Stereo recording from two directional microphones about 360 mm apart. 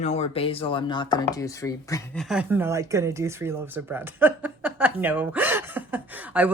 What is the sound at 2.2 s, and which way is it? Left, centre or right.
Speech, centre.